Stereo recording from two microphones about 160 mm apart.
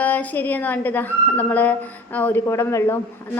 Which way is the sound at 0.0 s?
10° left (ahead or behind).